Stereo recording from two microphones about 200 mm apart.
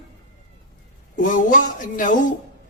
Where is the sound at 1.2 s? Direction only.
40° left (ahead or behind).